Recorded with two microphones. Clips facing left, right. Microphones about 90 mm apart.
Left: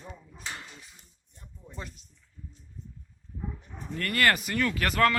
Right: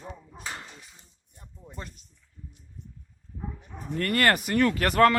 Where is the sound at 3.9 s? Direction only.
40° right (ahead or behind).